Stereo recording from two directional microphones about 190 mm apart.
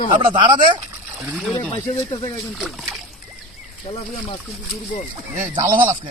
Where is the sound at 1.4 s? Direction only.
Centre (ahead or behind).